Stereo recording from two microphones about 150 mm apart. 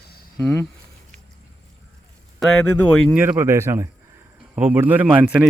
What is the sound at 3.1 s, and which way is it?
A man's voice, 10° right (ahead or behind).